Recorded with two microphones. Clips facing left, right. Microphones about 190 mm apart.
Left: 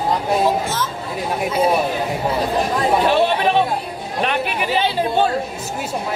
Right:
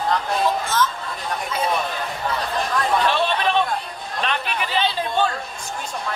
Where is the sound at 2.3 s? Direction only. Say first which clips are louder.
Left 5 dB; 25° left (ahead or behind).